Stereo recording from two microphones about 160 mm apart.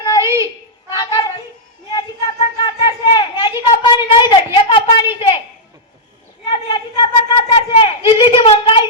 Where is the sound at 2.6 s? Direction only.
30° left (ahead or behind).